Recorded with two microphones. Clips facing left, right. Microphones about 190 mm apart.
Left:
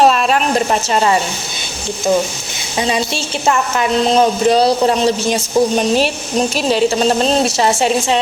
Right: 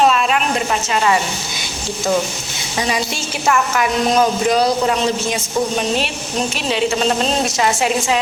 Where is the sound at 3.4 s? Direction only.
25° left (ahead or behind).